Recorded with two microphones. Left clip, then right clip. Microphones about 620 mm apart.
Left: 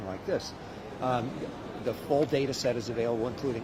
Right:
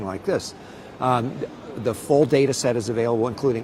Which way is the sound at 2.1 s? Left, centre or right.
Right.